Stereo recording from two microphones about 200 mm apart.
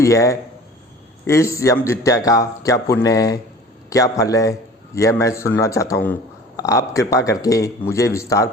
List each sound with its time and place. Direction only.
0.0 s a man's voice: 15° left (ahead or behind)